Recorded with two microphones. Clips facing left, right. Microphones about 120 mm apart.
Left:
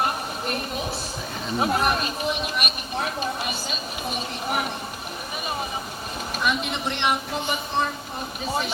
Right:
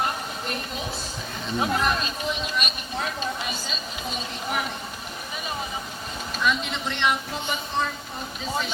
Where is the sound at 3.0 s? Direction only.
50° left (ahead or behind).